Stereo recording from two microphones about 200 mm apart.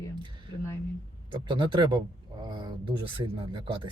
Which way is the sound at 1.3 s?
25° right (ahead or behind).